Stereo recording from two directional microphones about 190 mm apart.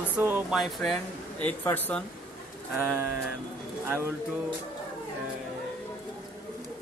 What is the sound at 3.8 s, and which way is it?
Speech, 10° right (ahead or behind).